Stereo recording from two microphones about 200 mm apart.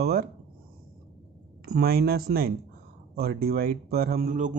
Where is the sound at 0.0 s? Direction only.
50° right (ahead or behind).